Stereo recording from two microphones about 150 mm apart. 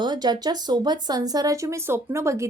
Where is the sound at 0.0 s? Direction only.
30° right (ahead or behind).